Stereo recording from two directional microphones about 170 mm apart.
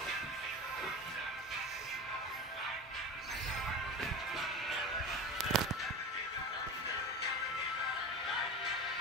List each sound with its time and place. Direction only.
4.0 s music: centre (ahead or behind)